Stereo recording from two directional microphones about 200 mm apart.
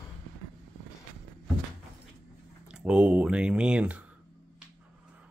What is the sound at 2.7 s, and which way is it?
Speech, 5° right (ahead or behind).